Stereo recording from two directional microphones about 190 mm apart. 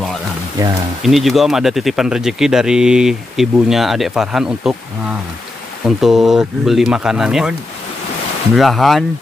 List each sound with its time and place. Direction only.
0.6 s speech: 15° right (ahead or behind)
1.0 s speech: centre (ahead or behind)
5.9 s speech: centre (ahead or behind)
8.5 s speech: centre (ahead or behind)